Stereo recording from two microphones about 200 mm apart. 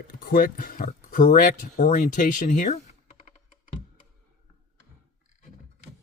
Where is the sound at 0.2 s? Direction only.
45° left (ahead or behind).